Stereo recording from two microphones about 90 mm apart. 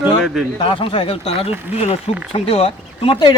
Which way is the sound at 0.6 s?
75° left (ahead or behind).